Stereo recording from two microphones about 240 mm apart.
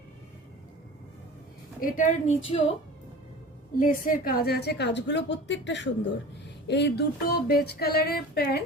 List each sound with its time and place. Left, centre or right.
1.8 s a woman's voice: left
3.8 s a woman's voice: left
6.7 s a sound: left